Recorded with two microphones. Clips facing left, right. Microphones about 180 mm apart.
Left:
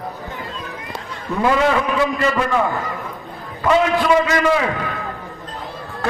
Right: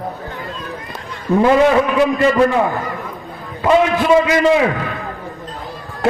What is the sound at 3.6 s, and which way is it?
Speech, 25° right (ahead or behind).